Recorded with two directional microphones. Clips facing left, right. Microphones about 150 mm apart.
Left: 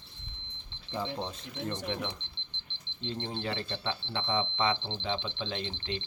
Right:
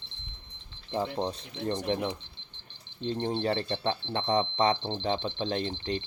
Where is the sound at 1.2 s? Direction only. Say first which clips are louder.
Right 5 dB; 35° right (ahead or behind).